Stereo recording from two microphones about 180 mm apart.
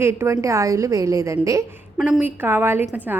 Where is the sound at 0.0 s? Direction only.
15° right (ahead or behind).